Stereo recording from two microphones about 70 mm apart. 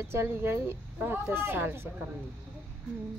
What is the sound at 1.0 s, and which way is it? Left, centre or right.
Speech, right.